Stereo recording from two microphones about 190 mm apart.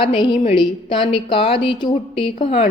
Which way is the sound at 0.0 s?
25° left (ahead or behind).